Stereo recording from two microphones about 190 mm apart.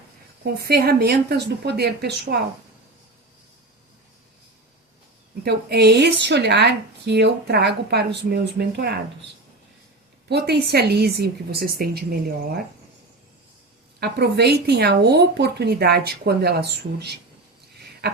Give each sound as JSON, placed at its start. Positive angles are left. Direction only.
{"t": 0.4, "sound": "speech", "side_deg": -55}
{"t": 5.5, "sound": "speech", "side_deg": -60}
{"t": 10.2, "sound": "speech", "side_deg": -60}
{"t": 14.0, "sound": "speech", "side_deg": -60}
{"t": 18.0, "sound": "a sound", "side_deg": -60}